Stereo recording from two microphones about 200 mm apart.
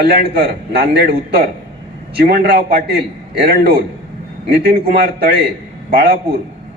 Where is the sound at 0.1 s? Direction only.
50° right (ahead or behind).